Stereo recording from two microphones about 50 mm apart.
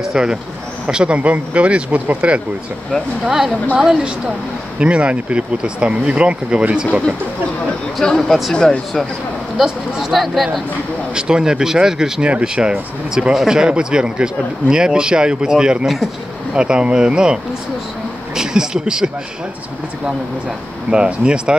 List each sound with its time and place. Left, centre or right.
0.0 s speech: centre
0.8 s speech: right
3.3 s speech: centre
4.7 s speech: right
8.0 s speech: centre
9.6 s speech: centre
11.1 s speech: centre
20.9 s speech: centre